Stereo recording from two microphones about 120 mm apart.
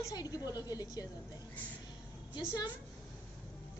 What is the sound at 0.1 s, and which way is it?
Speech, 30° left (ahead or behind).